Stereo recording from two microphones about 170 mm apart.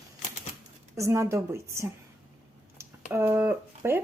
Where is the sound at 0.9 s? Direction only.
15° right (ahead or behind).